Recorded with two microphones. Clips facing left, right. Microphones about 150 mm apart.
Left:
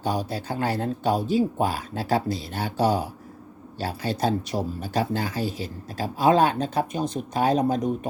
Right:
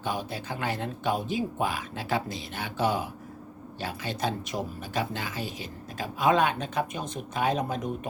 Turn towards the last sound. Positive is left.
turn(degrees=35)  # may be behind; listen again after turning